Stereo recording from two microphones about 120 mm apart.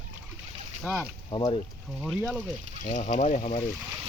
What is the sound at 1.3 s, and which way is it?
Speech, 40° left (ahead or behind).